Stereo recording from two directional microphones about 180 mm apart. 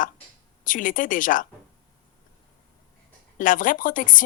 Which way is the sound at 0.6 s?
50° left (ahead or behind).